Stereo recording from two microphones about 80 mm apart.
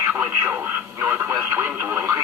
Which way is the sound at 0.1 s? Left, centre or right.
Right.